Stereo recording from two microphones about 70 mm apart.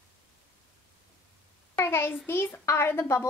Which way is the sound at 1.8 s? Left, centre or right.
Left.